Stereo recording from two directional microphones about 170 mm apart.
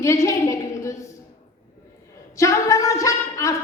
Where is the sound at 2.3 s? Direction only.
20° left (ahead or behind).